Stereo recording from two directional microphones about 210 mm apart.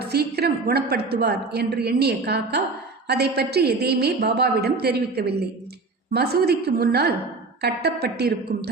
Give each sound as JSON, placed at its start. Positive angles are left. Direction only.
{"t": 0.0, "sound": "a woman's voice", "side_deg": -50}